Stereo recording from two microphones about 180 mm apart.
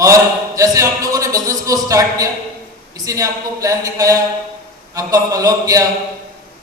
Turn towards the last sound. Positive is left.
turn(degrees=-20)  # may be behind; listen again after turning